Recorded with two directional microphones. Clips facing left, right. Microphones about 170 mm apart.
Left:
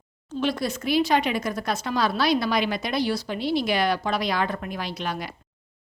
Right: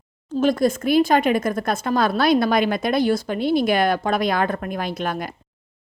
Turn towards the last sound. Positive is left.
turn(degrees=-50)  # may be behind; listen again after turning